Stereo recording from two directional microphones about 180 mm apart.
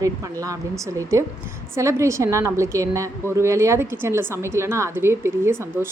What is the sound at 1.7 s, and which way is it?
A woman's voice, 15° right (ahead or behind).